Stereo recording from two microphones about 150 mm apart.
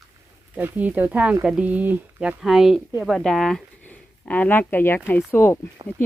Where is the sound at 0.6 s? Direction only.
10° right (ahead or behind).